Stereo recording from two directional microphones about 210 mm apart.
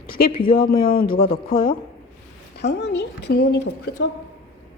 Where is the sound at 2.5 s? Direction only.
55° left (ahead or behind).